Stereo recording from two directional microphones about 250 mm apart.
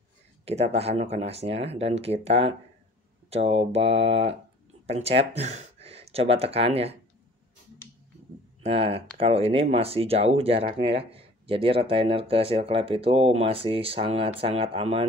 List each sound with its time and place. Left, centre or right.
0.5 s speech: right
8.6 s speech: right